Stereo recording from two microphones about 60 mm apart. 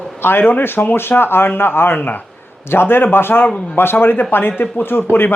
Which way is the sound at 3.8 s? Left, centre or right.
Left.